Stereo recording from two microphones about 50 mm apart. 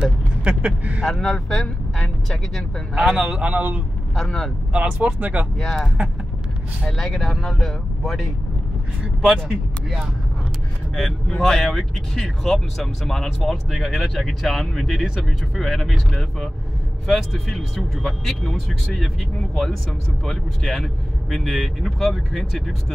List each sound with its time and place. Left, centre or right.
0.4 s speech: right
1.0 s speech: centre
2.9 s a man's voice: centre
3.2 s speech: right
4.1 s speech: centre
4.7 s speech: right
5.6 s speech: centre
6.9 s speech: centre
9.3 s speech: centre
11.0 s speech: centre
20.2 s speech: centre